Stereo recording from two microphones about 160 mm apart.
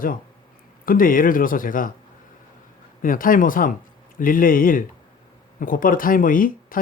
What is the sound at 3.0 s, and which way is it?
Speech, 60° left (ahead or behind).